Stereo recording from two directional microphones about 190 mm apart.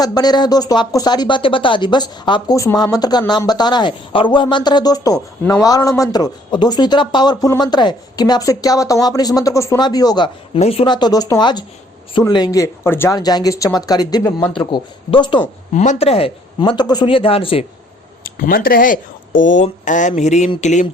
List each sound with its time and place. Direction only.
0.0 s speech: 20° left (ahead or behind)
15.7 s speech: 40° left (ahead or behind)
18.2 s speech: 50° left (ahead or behind)